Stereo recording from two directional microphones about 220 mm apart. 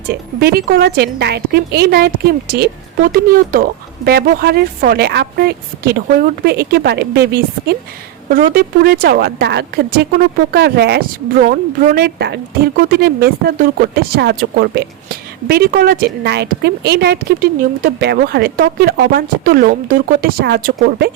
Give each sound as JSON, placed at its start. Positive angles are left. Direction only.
{"t": 0.1, "sound": "a woman's voice", "side_deg": -45}